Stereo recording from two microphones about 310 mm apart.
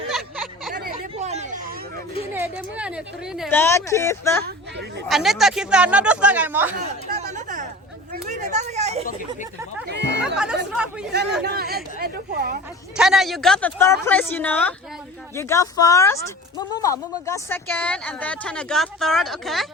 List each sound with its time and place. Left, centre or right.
0.1 s a sound: centre
1.2 s hubbub: right
2.3 s speech: centre
4.4 s speech: right
5.0 s speech: centre
7.1 s a sound: right
9.9 s chatter: right
10.3 s speech: centre
11.4 s speech: right
13.0 s speech: centre